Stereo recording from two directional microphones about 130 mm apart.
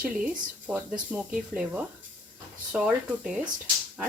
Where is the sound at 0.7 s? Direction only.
10° right (ahead or behind).